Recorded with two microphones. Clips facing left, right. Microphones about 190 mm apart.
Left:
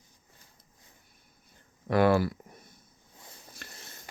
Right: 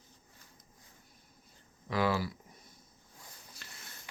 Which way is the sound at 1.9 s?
60° left (ahead or behind).